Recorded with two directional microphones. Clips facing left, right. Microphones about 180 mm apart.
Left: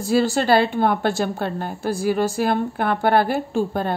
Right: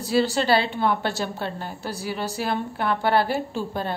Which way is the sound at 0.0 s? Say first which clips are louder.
Left 3 dB; 45° left (ahead or behind).